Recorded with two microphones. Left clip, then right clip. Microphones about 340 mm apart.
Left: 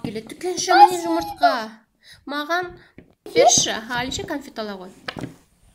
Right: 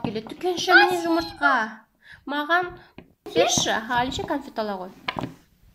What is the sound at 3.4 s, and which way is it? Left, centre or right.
A woman's voice, centre.